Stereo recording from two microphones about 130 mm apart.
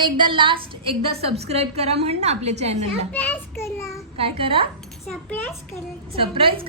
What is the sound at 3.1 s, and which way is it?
Child singing, 10° left (ahead or behind).